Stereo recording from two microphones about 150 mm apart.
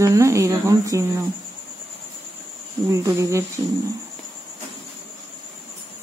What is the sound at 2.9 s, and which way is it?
Speech, 20° right (ahead or behind).